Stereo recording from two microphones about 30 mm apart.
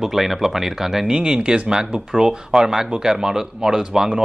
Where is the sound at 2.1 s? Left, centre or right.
Centre.